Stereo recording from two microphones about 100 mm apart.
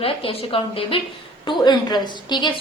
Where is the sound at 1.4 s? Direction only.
50° left (ahead or behind).